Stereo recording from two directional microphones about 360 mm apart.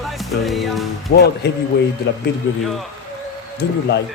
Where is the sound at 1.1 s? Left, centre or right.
Left.